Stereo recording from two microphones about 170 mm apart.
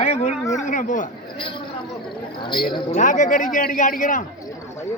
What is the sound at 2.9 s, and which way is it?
A man's voice, 50° left (ahead or behind).